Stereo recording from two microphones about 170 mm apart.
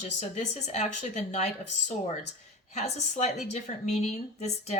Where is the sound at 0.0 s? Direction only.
45° left (ahead or behind).